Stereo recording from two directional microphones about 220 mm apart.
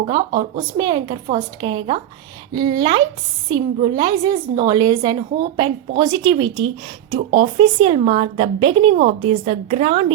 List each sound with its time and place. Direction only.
0.0 s a woman's voice: 20° right (ahead or behind)